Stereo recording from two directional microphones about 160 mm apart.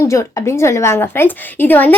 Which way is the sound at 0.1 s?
15° left (ahead or behind).